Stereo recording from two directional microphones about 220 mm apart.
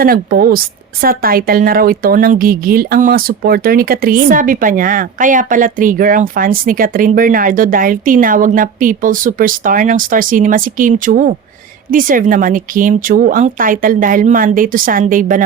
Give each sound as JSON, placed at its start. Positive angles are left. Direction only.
{"t": 0.0, "sound": "a woman's voice", "side_deg": -40}